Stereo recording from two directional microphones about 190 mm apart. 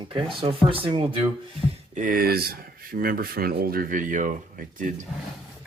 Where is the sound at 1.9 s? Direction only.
45° right (ahead or behind).